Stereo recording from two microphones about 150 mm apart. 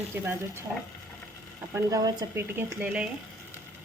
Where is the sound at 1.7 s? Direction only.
25° right (ahead or behind); by 3.1 s 10° right (ahead or behind).